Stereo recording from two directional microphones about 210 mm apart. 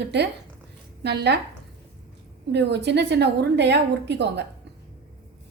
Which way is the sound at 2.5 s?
55° right (ahead or behind).